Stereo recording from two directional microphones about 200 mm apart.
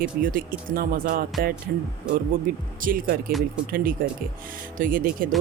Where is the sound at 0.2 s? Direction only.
45° right (ahead or behind).